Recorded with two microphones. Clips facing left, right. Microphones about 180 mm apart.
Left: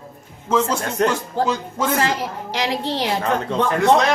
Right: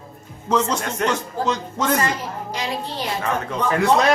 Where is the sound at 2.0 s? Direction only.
85° left.